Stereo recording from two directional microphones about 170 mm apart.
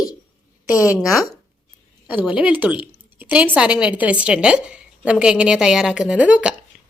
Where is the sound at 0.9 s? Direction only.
5° right (ahead or behind).